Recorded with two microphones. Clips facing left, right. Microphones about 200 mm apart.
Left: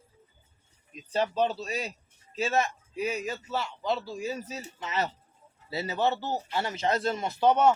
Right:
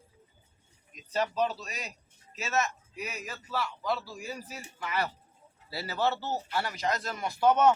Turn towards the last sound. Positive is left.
turn(degrees=15)  # may be behind; listen again after turning